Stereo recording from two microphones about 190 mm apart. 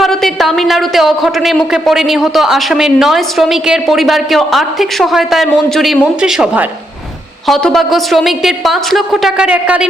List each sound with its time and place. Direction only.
0.0 s a woman's voice: centre (ahead or behind)